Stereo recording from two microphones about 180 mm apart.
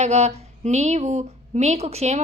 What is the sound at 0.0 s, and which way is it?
A woman's voice, 40° right (ahead or behind).